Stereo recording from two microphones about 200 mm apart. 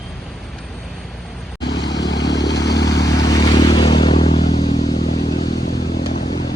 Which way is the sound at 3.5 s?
25° left (ahead or behind).